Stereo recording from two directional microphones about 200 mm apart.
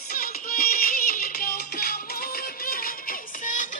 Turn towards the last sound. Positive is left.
turn(degrees=40)  # may be behind; listen again after turning